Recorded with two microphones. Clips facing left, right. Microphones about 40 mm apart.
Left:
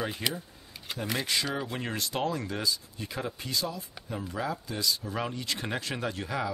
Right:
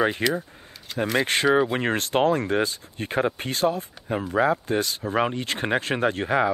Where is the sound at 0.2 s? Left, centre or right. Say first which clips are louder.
Right 9 dB; right.